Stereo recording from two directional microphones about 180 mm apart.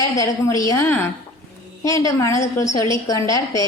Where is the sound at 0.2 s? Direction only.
20° left (ahead or behind).